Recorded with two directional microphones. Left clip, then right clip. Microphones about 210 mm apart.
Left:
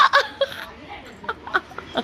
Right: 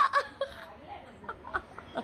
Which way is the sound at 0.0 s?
5° left (ahead or behind).